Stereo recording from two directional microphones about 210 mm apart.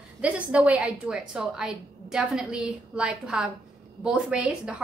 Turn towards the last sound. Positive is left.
turn(degrees=-5)  # may be behind; listen again after turning